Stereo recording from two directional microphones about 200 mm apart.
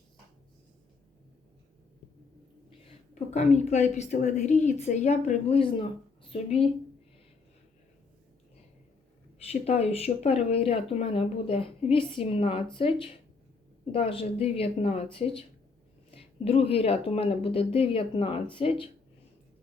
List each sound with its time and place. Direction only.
3.3 s a woman's voice: 35° left (ahead or behind)
9.5 s speech: 30° left (ahead or behind)